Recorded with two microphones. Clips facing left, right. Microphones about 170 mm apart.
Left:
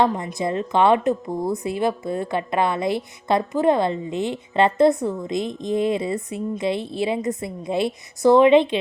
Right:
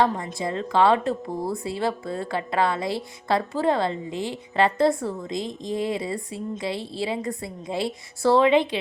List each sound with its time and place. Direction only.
0.0 s speech: 20° left (ahead or behind)